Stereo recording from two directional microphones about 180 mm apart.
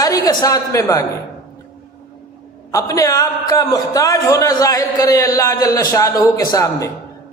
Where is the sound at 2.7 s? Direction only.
20° left (ahead or behind).